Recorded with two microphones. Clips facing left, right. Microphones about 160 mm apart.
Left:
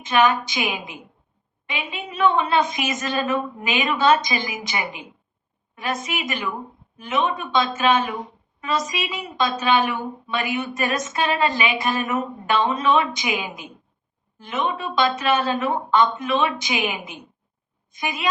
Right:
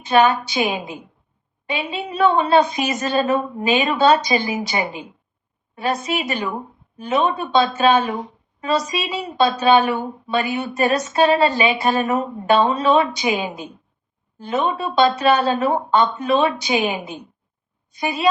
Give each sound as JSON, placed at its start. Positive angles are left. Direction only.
{"t": 0.0, "sound": "a woman's voice", "side_deg": -35}